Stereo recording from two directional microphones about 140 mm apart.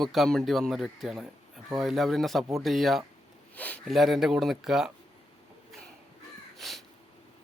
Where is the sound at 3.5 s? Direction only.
10° left (ahead or behind).